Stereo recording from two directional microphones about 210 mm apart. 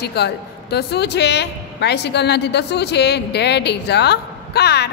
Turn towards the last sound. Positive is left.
turn(degrees=50)  # may be behind; listen again after turning